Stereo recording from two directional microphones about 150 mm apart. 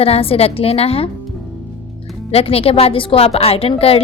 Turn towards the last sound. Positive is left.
turn(degrees=40)  # may be behind; listen again after turning